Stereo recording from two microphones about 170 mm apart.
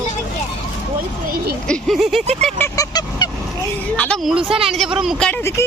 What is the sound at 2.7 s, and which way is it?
Honk, 25° left (ahead or behind).